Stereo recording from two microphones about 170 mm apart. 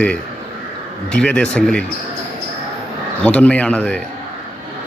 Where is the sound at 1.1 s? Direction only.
5° left (ahead or behind).